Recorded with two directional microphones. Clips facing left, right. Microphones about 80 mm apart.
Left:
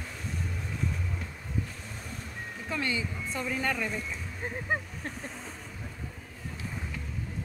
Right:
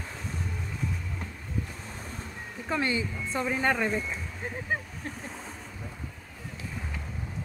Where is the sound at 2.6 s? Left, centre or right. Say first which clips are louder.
Right 4 dB; right.